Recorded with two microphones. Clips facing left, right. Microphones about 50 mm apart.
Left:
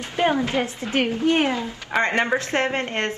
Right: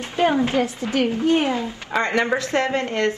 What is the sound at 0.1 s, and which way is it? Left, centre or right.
A woman's voice, left.